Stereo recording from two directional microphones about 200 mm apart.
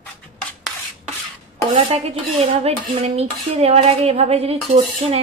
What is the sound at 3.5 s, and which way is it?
A woman's voice, 30° right (ahead or behind).